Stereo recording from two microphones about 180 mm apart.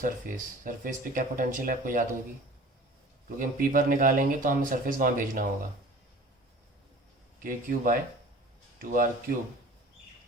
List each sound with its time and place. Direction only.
0.0 s speech: 45° right (ahead or behind)
3.2 s speech: 50° right (ahead or behind)
7.4 s speech: 50° right (ahead or behind)